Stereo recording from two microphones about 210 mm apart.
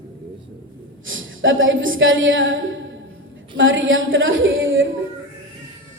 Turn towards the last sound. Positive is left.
turn(degrees=-65)  # may be behind; listen again after turning